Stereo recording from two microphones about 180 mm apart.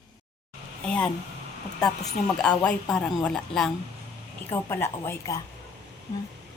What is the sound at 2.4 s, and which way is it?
Speech, 5° left (ahead or behind).